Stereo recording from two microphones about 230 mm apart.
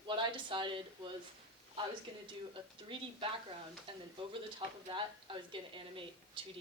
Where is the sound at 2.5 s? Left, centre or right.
Right.